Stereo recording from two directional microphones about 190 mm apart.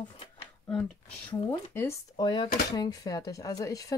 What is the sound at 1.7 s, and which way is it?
Speech, 10° left (ahead or behind).